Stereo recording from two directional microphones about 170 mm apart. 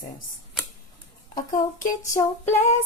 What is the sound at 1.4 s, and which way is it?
Speech, 50° left (ahead or behind).